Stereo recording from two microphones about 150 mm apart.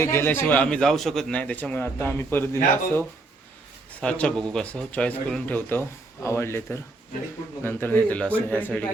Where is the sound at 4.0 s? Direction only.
5° left (ahead or behind).